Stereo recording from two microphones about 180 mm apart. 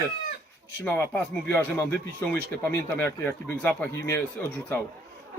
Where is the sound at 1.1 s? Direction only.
10° left (ahead or behind).